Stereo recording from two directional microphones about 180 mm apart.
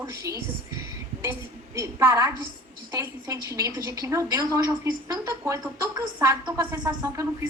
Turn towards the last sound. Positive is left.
turn(degrees=-15)  # may be behind; listen again after turning